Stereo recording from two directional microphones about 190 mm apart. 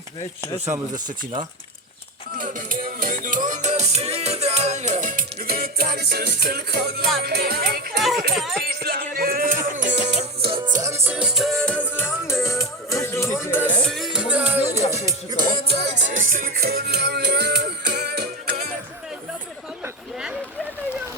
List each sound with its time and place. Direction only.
0.7 s music: 45° right (ahead or behind)
2.4 s music: 45° right (ahead or behind)
8.3 s speech: centre (ahead or behind)
8.6 s music: 55° right (ahead or behind); by 10.6 s 30° right (ahead or behind)
10.8 s music: 15° right (ahead or behind)
16.3 s music: 50° right (ahead or behind)
19.8 s chatter: 5° right (ahead or behind)